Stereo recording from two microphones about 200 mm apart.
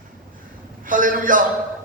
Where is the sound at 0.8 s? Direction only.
45° right (ahead or behind).